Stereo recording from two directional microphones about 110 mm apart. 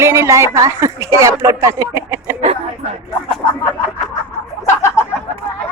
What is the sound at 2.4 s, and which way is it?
Speech, 75° right (ahead or behind).